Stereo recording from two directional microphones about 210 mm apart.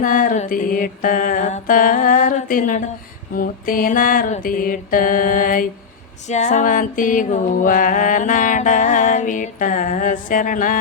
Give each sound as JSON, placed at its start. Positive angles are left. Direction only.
{"t": 0.0, "sound": "music", "side_deg": 40}